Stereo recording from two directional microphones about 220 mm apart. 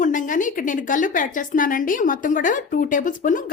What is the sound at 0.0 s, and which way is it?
A woman's voice, 35° left (ahead or behind).